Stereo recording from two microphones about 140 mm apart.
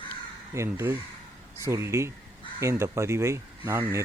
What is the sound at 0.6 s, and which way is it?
Speech, 15° right (ahead or behind).